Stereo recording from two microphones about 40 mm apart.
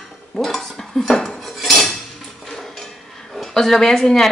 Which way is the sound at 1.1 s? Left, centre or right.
Centre.